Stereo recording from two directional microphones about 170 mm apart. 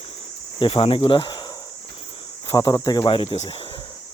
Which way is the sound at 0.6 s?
35° left (ahead or behind).